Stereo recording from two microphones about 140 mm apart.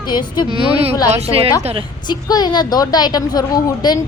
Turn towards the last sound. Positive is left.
turn(degrees=25)  # may be behind; listen again after turning